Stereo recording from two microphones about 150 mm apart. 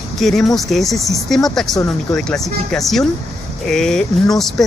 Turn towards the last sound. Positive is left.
turn(degrees=5)  # may be behind; listen again after turning